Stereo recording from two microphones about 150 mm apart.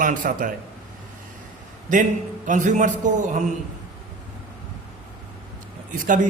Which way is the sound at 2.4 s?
55° right (ahead or behind).